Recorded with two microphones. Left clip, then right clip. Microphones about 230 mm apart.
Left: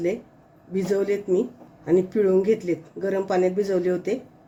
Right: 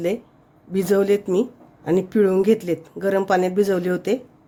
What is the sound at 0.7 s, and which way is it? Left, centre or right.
Speech, right.